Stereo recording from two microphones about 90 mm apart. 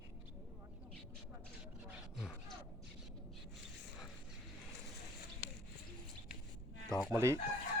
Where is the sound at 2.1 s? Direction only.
Centre (ahead or behind).